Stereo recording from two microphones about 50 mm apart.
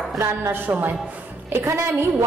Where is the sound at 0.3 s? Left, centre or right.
Right.